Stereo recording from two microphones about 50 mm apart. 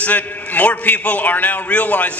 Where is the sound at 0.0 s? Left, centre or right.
Left.